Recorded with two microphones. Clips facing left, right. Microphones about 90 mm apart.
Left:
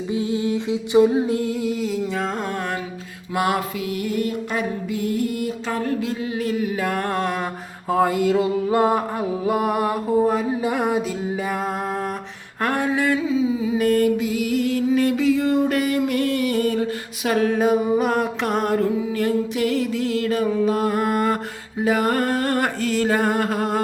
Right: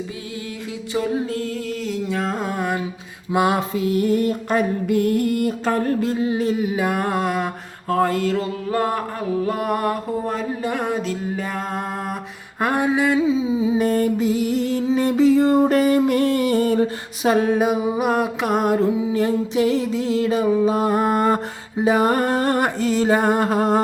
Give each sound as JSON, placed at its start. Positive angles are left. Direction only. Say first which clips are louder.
{"t": 0.1, "sound": "a sound", "louder": "left 10 dB", "side_deg": 25}
{"t": 3.3, "sound": "music", "louder": "right 3 dB", "side_deg": -20}
{"t": 3.8, "sound": "music", "louder": "right 5 dB", "side_deg": -35}
{"t": 6.3, "sound": "mantra", "louder": "right 3 dB", "side_deg": -25}
{"t": 7.9, "sound": "a sound", "louder": "left 1 dB", "side_deg": 10}
{"t": 12.6, "sound": "music", "louder": "right 2 dB", "side_deg": -15}